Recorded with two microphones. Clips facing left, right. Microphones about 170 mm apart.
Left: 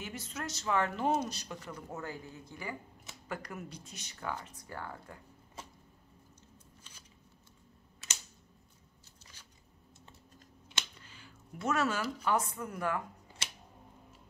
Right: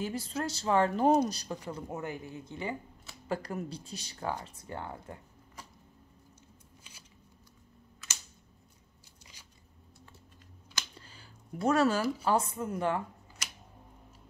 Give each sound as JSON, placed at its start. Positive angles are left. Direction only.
{"t": 0.0, "sound": "speech", "side_deg": -35}
{"t": 1.7, "sound": "speech", "side_deg": -20}
{"t": 5.6, "sound": "a sound", "side_deg": 25}
{"t": 6.8, "sound": "scissors", "side_deg": -10}
{"t": 9.2, "sound": "biting", "side_deg": -10}
{"t": 11.0, "sound": "speech", "side_deg": -35}